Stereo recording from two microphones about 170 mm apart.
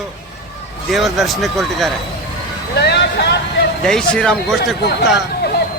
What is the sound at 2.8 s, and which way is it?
Speech, 80° left.